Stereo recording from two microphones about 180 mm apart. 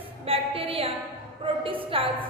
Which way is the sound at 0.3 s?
30° right (ahead or behind).